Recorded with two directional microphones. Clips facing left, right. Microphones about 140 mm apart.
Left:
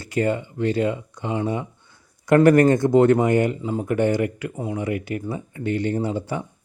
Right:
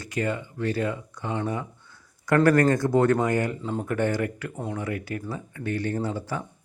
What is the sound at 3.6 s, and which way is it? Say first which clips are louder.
Speech: left 5 dB; 10° left (ahead or behind).